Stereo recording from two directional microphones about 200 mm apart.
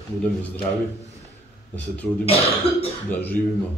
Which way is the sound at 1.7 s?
5° left (ahead or behind).